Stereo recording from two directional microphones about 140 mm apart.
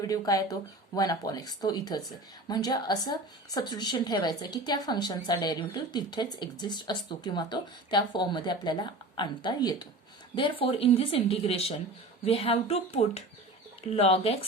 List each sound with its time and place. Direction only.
0.0 s a woman's voice: 25° left (ahead or behind); by 14.3 s 45° left (ahead or behind)